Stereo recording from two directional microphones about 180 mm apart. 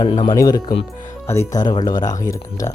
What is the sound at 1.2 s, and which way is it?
Speech, 15° left (ahead or behind).